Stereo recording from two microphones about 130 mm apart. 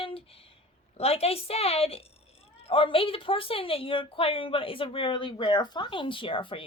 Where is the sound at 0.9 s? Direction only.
50° left (ahead or behind).